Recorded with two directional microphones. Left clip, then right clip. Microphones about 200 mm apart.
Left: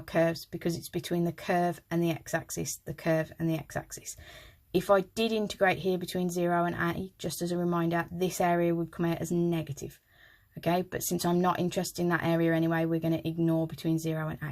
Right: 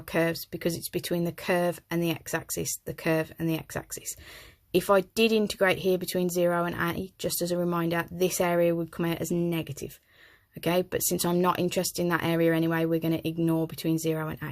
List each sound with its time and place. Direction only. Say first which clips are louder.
0.1 s speech: even; 35° right (ahead or behind)